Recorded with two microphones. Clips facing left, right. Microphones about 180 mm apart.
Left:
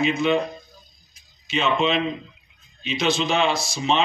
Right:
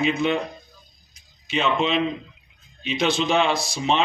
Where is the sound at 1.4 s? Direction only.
55° right (ahead or behind).